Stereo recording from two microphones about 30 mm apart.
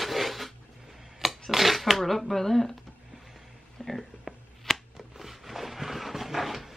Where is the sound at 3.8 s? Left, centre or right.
Centre.